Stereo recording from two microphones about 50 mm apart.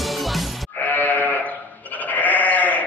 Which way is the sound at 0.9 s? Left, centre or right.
Left.